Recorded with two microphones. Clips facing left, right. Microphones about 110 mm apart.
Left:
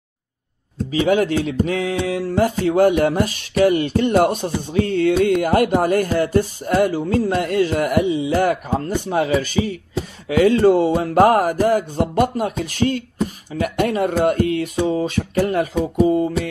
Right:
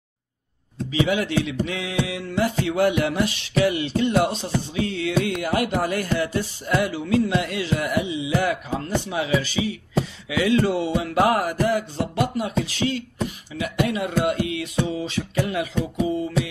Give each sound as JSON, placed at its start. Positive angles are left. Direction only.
{"t": 0.9, "sound": "music", "side_deg": 45}